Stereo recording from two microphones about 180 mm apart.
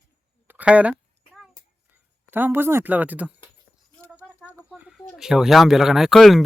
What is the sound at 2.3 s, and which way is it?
Speech, 10° right (ahead or behind).